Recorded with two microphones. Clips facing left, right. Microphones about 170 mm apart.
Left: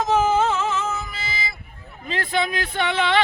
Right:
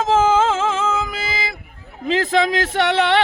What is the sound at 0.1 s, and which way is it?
Music, 90° right.